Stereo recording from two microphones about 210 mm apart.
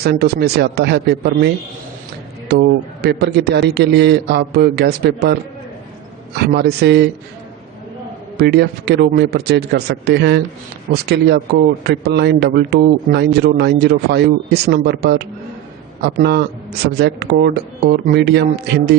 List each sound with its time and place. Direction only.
0.0 s a man's voice: 50° right (ahead or behind)
8.4 s a man's voice: 50° right (ahead or behind)